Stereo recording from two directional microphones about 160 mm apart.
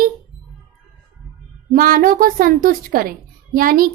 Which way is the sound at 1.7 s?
60° right (ahead or behind).